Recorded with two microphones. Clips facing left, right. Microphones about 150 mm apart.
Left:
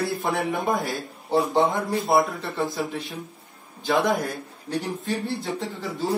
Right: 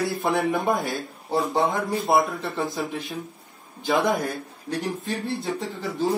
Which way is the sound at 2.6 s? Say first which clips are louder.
Left 2 dB; 20° right (ahead or behind).